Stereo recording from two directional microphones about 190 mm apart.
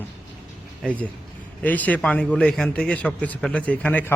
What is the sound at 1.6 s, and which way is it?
A man's voice, 10° left (ahead or behind).